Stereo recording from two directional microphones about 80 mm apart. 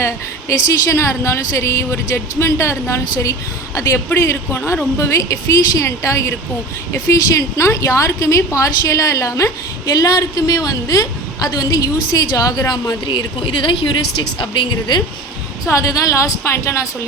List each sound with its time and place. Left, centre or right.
0.0 s a woman's voice: left
12.9 s speech: left
15.6 s a woman's voice: left